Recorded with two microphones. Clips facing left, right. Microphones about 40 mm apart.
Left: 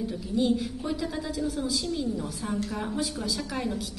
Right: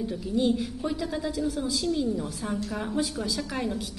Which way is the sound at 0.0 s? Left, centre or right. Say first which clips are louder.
Right 1 dB; centre.